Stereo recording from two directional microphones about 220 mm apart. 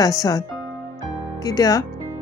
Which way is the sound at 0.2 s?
15° left (ahead or behind).